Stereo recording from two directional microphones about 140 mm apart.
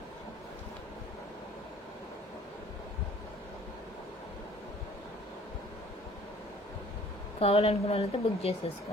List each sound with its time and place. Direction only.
7.3 s a woman's voice: 45° left (ahead or behind)